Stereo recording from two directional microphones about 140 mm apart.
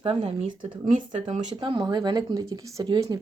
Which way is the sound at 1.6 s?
35° right (ahead or behind).